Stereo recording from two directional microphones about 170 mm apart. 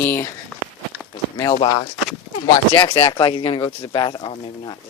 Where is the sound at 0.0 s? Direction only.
15° left (ahead or behind).